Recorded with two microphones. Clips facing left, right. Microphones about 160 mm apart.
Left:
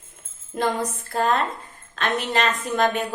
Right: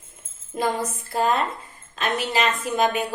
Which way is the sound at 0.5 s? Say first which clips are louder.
Left 1 dB; 5° right (ahead or behind).